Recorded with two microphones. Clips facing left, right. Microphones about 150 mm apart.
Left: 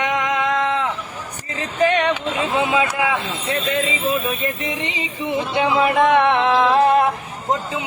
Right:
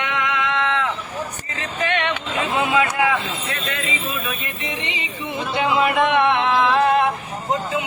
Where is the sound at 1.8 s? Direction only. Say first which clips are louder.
Left 6 dB; 35° left (ahead or behind).